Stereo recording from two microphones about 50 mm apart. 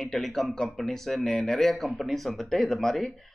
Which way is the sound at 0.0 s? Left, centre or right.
Centre.